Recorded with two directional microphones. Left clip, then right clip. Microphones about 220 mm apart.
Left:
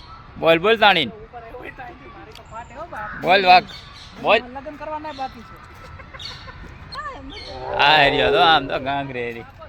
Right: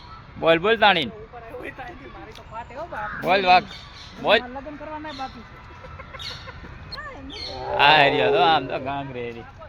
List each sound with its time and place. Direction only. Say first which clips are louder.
0.3 s speech: left 3 dB; 15° left (ahead or behind)
2.6 s speech: even; 15° right (ahead or behind)
3.2 s speech: left 4 dB; 20° left (ahead or behind)
4.2 s speech: left 2 dB; 5° left (ahead or behind)
7.7 s speech: left 1 dB; 10° left (ahead or behind)